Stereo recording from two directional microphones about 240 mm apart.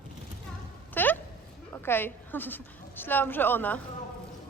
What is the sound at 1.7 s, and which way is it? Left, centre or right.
A woman's voice, centre.